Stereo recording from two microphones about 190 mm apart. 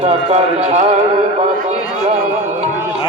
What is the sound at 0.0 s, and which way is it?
Music, 35° right (ahead or behind).